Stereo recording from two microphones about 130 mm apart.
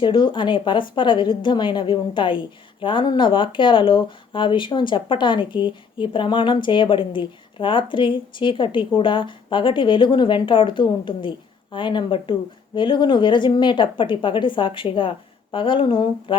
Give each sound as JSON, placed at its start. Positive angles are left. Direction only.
{"t": 0.0, "sound": "speech", "side_deg": 40}